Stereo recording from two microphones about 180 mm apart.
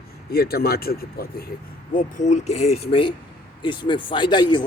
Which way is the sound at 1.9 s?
45° left (ahead or behind).